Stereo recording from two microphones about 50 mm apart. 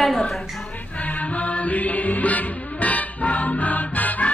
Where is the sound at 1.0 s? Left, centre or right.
Left.